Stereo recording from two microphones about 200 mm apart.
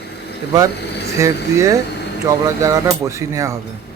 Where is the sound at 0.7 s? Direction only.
55° left (ahead or behind).